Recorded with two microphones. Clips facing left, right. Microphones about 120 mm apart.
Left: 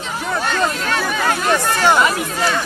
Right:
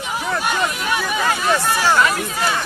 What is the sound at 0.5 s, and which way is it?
Speech, 10° right (ahead or behind).